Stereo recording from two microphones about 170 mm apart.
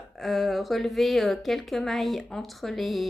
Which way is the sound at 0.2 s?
Centre (ahead or behind).